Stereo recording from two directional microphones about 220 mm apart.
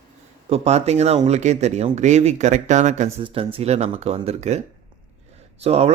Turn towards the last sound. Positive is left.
turn(degrees=-30)  # may be behind; listen again after turning